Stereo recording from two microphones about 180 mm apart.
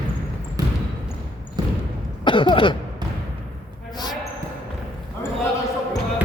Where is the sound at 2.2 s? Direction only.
25° left (ahead or behind).